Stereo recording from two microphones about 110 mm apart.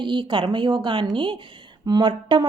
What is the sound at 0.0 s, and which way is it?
A woman's voice, 45° right (ahead or behind).